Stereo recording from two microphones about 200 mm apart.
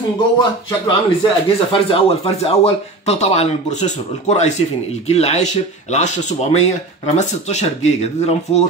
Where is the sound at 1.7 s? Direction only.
25° left (ahead or behind).